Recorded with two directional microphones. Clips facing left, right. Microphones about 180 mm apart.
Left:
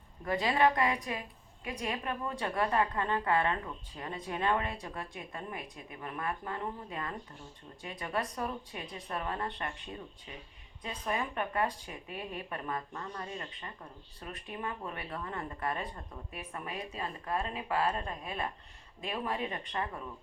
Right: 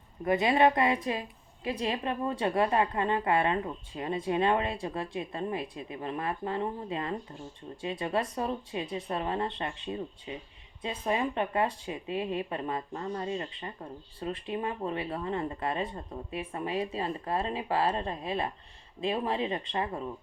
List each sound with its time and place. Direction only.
0.3 s a woman's voice: 20° right (ahead or behind)